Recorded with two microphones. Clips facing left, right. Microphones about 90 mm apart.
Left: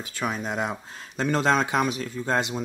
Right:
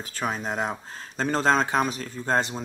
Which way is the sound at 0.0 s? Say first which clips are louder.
Even; 40° right (ahead or behind).